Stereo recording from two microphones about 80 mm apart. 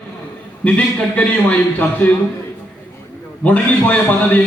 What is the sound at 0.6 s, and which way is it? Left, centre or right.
A man's voice, centre.